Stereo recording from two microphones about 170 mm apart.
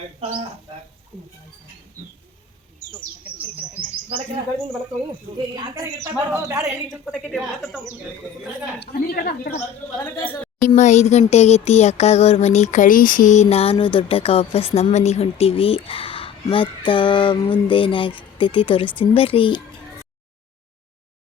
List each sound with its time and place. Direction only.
0.2 s speech: 35° right (ahead or behind)
4.1 s speech: 30° right (ahead or behind)
5.5 s speech: 20° right (ahead or behind)
6.7 s a woman's voice: centre (ahead or behind)
8.8 s a woman's voice: 65° left (ahead or behind)
10.0 s a woman's voice: 10° left (ahead or behind)
10.8 s a sound: 40° left (ahead or behind)